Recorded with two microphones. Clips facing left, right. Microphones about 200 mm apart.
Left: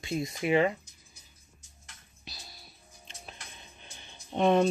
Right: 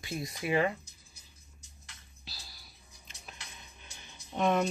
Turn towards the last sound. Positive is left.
turn(degrees=30)  # may be behind; listen again after turning